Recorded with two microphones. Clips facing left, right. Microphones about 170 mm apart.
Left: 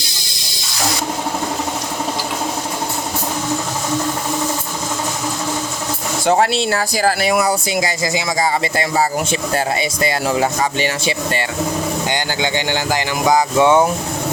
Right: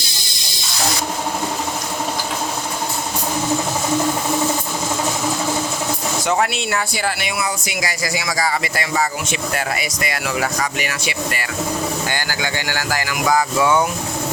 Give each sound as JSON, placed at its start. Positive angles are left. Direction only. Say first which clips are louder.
{"t": 6.2, "sound": "speech", "louder": "left 6 dB", "side_deg": 30}
{"t": 7.8, "sound": "speech", "louder": "left 4 dB", "side_deg": 25}